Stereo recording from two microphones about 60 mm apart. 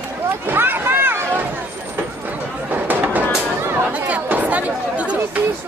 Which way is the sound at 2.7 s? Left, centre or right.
Right.